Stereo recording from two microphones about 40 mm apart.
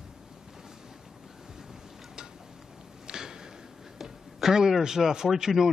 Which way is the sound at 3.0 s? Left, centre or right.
Centre.